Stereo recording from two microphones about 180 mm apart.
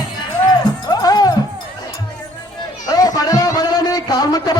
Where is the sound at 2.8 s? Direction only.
20° left (ahead or behind).